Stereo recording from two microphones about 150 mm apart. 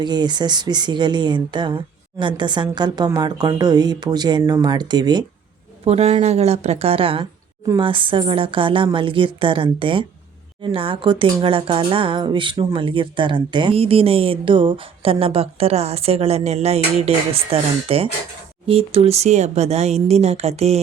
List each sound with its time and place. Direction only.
0.0 s speech: 30° right (ahead or behind)
5.8 s speech: 40° right (ahead or behind)